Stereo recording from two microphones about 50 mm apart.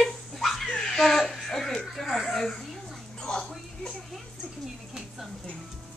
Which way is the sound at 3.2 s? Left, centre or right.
Centre.